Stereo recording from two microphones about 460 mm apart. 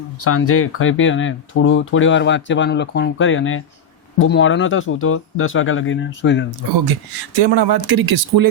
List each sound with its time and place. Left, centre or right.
0.3 s speech: left
7.3 s speech: right